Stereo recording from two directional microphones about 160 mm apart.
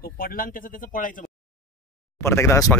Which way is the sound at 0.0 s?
65° left (ahead or behind).